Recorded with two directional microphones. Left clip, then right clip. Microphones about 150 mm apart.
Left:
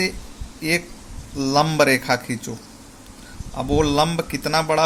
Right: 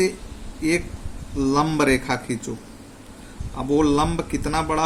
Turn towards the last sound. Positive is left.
turn(degrees=60)  # may be behind; listen again after turning